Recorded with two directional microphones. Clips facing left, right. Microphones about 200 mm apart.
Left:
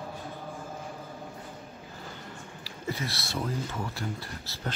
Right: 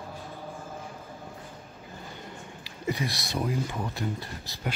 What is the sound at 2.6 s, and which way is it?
Speech, 15° right (ahead or behind).